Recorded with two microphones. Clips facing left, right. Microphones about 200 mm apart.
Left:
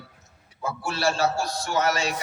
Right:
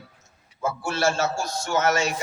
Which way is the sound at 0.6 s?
45° right (ahead or behind).